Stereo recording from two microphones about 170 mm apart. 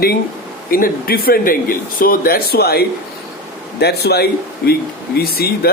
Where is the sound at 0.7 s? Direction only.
55° left (ahead or behind).